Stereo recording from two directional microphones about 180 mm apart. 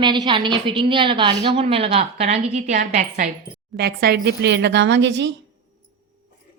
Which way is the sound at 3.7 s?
60° right (ahead or behind).